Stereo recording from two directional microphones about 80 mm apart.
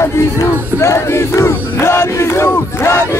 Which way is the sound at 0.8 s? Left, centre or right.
Left.